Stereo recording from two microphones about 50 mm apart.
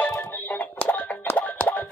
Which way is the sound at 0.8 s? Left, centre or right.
Left.